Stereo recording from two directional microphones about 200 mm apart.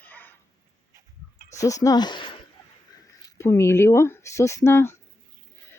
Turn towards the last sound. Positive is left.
turn(degrees=10)  # may be behind; listen again after turning